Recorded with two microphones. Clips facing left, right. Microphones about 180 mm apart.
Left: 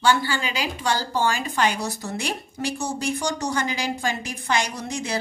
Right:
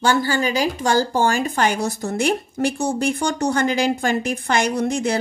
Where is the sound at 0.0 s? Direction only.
45° right (ahead or behind).